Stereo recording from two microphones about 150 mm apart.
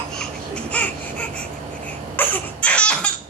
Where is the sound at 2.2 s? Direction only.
10° left (ahead or behind).